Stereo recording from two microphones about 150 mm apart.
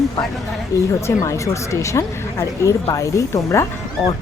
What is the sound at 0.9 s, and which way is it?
Speech, 20° left (ahead or behind).